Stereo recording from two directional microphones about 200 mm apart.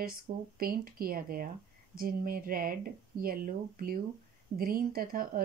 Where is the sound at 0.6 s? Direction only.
45° right (ahead or behind).